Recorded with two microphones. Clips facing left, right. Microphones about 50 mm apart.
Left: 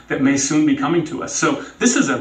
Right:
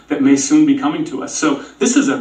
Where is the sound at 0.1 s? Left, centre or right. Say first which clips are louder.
Right 5 dB; left.